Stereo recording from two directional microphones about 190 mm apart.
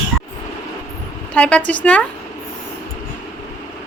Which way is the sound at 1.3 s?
5° left (ahead or behind).